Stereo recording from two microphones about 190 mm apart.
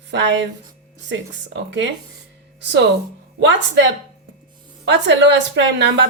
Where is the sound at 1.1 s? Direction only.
70° right (ahead or behind).